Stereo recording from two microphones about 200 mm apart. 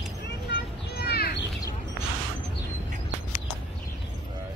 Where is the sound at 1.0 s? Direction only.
50° left (ahead or behind).